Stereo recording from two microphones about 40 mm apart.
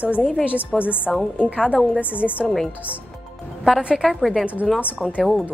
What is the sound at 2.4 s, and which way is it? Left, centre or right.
Speech, centre.